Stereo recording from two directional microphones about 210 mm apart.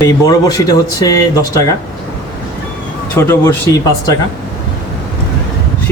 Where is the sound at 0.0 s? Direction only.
15° left (ahead or behind).